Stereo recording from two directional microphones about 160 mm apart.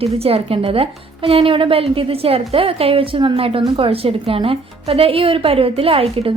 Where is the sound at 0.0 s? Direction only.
40° right (ahead or behind).